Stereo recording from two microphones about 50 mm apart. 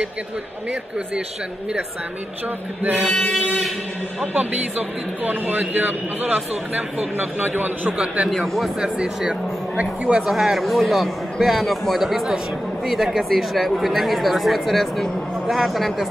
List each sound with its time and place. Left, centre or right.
2.8 s a man's voice: right
3.1 s chant: left
4.4 s a man's voice: right
8.3 s speech: centre
8.7 s speech: centre
10.2 s speech: centre